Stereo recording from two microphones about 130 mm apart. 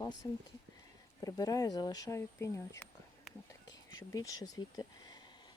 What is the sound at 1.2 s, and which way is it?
Speech, 30° left (ahead or behind).